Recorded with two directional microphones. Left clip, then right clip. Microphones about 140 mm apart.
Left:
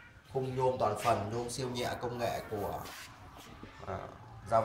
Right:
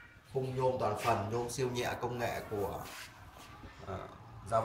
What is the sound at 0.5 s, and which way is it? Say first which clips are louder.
Speech: left 2 dB; 10° right (ahead or behind).